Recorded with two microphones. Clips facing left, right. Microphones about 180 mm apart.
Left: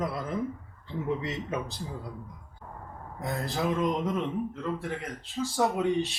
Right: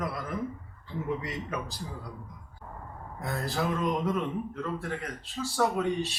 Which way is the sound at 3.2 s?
20° left (ahead or behind).